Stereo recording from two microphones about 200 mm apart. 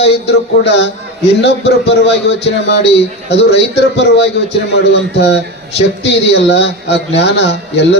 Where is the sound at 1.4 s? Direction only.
60° left (ahead or behind).